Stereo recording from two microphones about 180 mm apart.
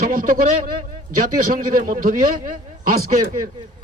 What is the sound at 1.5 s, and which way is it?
Speech, 50° right (ahead or behind).